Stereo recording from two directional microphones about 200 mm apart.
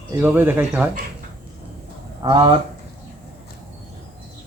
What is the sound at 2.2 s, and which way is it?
Speech, 20° right (ahead or behind).